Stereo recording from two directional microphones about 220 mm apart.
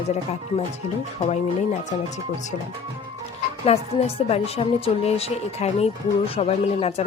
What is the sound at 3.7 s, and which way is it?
Speech, 30° left (ahead or behind).